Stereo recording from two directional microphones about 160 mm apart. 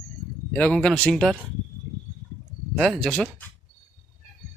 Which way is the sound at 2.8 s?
5° left (ahead or behind).